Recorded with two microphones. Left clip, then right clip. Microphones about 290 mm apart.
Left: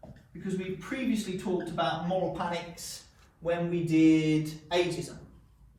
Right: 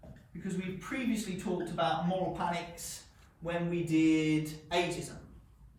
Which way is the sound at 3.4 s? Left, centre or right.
Centre.